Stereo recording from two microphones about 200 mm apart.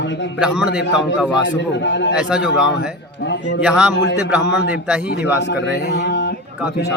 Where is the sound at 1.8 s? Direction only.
65° left (ahead or behind).